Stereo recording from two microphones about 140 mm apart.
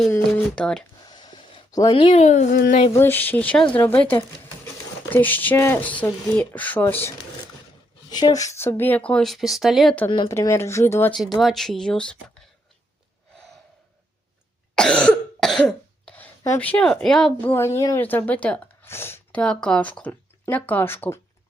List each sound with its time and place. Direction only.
0.3 s speech: 5° left (ahead or behind)
1.0 s a sound: 30° left (ahead or behind)
2.1 s speech: 55° left (ahead or behind); by 2.7 s 80° left
2.7 s a sound: 50° left (ahead or behind)
3.0 s speech: 15° left (ahead or behind)
8.1 s speech: 25° left (ahead or behind); by 9.9 s centre (ahead or behind)
10.2 s speech: 20° left (ahead or behind)
11.3 s speech: centre (ahead or behind)
14.8 s cough: 5° left (ahead or behind)
16.6 s speech: 10° left (ahead or behind)
17.4 s speech: 15° left (ahead or behind)